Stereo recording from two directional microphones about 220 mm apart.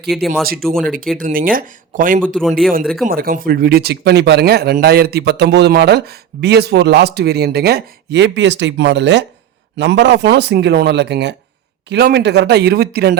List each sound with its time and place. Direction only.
0.1 s speech: centre (ahead or behind)
1.2 s speech: 40° right (ahead or behind)
2.8 s speech: centre (ahead or behind)
3.1 s speech: 40° right (ahead or behind)